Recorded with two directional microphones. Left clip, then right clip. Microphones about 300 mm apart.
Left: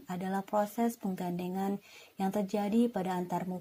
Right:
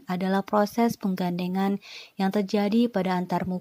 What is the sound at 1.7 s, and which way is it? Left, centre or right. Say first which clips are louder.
Speech: right 7 dB; right.